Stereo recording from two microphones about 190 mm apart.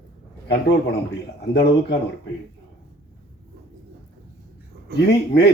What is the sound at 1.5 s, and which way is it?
Speech, 60° left (ahead or behind).